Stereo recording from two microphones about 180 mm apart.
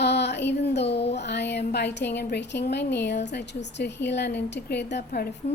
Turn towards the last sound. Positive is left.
turn(degrees=65)  # may be behind; listen again after turning